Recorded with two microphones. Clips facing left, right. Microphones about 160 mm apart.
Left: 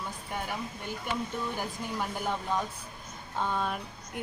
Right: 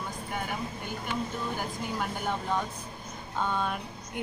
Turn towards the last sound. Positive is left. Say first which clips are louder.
# right 1 dB
turn(degrees=0)  # may be behind; listen again after turning